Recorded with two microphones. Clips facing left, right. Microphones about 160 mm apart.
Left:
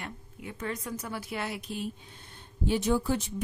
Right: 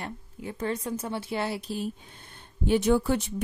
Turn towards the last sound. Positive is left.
turn(degrees=-65)  # may be behind; listen again after turning